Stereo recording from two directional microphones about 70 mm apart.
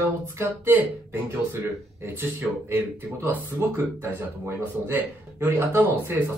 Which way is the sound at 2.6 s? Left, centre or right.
Right.